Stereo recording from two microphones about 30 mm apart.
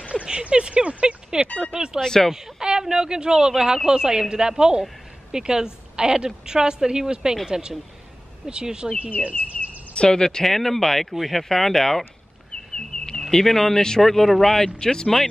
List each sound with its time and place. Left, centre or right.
0.1 s a woman's voice: right
2.0 s speech: centre
2.6 s a woman's voice: right
9.9 s speech: left
10.4 s speech: centre
11.1 s speech: centre
11.4 s speech: centre
12.7 s a sound: left
13.3 s speech: centre
13.7 s speech: left
14.0 s speech: centre; by 15.2 s left